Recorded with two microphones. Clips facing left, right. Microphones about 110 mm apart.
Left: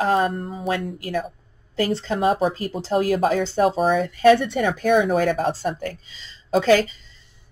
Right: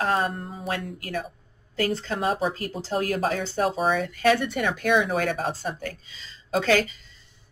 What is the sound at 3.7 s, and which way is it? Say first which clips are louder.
Speech: left 4 dB; 50° left (ahead or behind).